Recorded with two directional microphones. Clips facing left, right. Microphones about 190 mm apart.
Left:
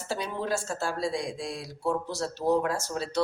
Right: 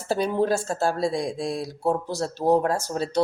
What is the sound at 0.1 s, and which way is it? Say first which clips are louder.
Speech: right 8 dB; 45° right (ahead or behind).